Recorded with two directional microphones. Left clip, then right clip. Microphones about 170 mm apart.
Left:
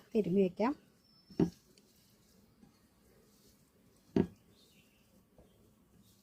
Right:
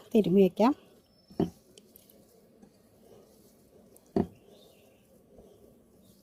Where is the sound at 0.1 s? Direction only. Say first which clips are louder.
Right 8 dB; 70° right (ahead or behind).